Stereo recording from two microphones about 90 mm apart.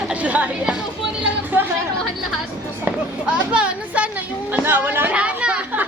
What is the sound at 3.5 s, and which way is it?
Speech, 10° right (ahead or behind).